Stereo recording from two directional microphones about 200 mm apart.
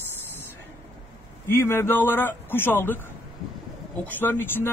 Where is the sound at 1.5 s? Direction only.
10° left (ahead or behind).